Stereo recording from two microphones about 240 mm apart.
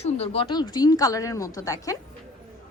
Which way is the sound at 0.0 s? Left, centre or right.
Left.